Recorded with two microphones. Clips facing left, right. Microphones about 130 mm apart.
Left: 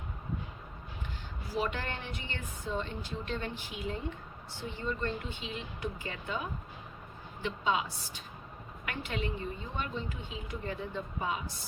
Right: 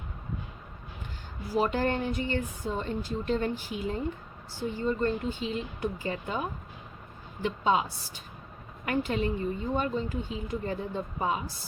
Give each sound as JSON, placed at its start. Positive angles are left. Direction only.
{"t": 1.5, "sound": "speech", "side_deg": -40}
{"t": 7.4, "sound": "speech", "side_deg": -40}